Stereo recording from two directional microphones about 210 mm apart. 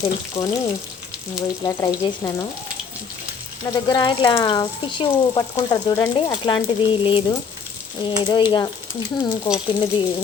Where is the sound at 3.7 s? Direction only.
20° left (ahead or behind).